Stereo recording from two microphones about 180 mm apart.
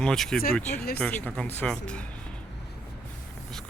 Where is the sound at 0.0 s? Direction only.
5° left (ahead or behind).